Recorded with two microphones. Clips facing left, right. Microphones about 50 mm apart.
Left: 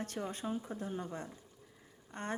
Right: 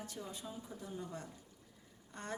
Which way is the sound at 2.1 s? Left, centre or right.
Left.